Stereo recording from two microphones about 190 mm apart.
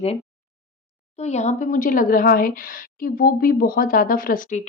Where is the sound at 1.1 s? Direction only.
35° left (ahead or behind).